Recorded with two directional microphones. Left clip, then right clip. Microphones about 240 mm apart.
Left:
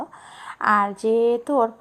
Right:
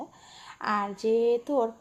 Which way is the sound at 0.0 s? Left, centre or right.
Left.